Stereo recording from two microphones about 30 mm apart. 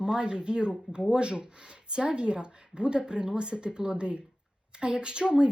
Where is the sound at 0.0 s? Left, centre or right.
Right.